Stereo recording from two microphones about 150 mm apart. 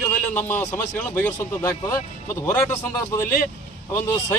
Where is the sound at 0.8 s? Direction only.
10° left (ahead or behind).